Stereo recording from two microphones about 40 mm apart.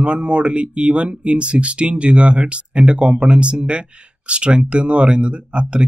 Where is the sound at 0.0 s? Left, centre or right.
Right.